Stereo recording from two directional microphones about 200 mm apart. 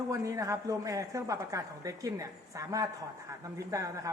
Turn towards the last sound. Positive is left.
turn(degrees=-15)  # may be behind; listen again after turning